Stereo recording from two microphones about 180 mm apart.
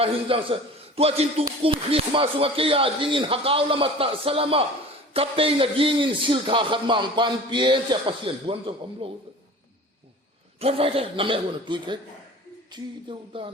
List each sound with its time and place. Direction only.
0.0 s a man's voice: 30° right (ahead or behind)
10.6 s a man's voice: 30° right (ahead or behind)